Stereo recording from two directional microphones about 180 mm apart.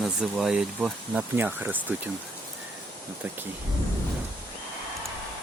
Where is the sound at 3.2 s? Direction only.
10° right (ahead or behind).